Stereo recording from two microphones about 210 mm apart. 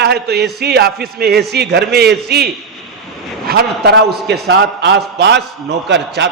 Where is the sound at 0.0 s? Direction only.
50° right (ahead or behind).